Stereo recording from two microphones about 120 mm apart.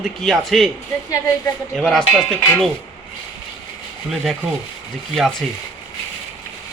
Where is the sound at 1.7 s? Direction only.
5° left (ahead or behind).